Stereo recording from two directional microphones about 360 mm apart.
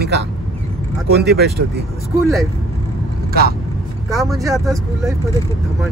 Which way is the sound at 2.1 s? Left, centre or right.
Centre.